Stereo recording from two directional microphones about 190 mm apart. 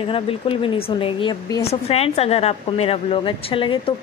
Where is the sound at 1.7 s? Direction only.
35° left (ahead or behind).